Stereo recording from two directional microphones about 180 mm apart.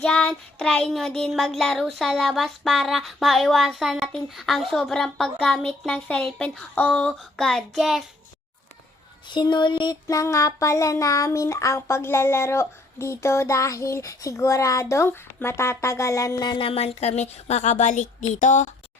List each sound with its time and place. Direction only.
0.0 s child singing: 5° left (ahead or behind)
9.3 s a sound: 25° left (ahead or behind); by 18.3 s 40° left (ahead or behind)
18.3 s speech: 45° left (ahead or behind)